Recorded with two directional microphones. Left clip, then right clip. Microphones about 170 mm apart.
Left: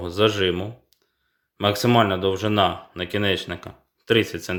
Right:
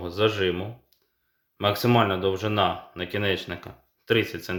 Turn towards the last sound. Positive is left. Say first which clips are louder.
# left 3 dB
turn(degrees=30)  # may be behind; listen again after turning